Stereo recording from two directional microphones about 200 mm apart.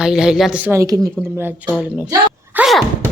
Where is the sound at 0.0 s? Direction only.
5° right (ahead or behind).